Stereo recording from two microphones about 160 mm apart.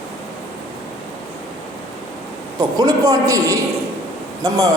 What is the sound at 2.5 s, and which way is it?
A woman's voice, 25° right (ahead or behind).